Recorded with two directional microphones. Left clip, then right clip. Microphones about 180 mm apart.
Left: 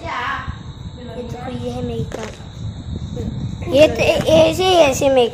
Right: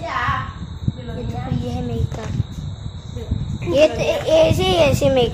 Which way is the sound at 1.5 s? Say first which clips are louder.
Left 3 dB; 15° left (ahead or behind).